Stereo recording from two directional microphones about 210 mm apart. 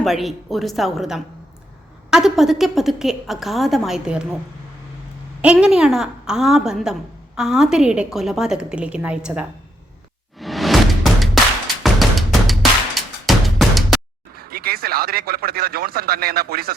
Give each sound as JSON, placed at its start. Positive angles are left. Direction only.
{"t": 0.0, "sound": "a woman's voice", "side_deg": 0}
{"t": 5.4, "sound": "a woman's voice", "side_deg": -5}
{"t": 10.4, "sound": "music", "side_deg": 0}
{"t": 14.3, "sound": "speech", "side_deg": -45}